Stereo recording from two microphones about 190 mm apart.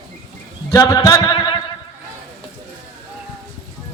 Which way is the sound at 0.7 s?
15° left (ahead or behind).